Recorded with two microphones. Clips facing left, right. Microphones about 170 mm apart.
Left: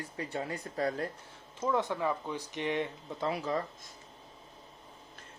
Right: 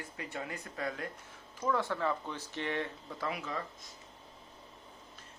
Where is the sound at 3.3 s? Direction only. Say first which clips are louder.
Left 6 dB; 35° left (ahead or behind).